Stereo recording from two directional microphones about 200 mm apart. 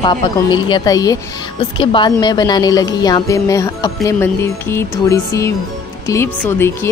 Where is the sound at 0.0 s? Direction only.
25° left (ahead or behind).